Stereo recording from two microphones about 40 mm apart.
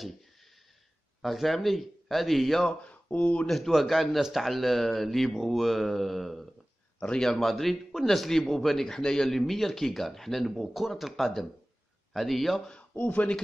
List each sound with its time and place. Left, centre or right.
1.2 s speech: centre
2.8 s speech: left
3.4 s speech: centre
7.0 s a man's voice: left
7.2 s speech: centre
12.9 s speech: left